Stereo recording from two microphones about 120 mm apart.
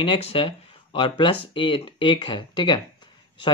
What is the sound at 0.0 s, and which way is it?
Speech, 50° left (ahead or behind).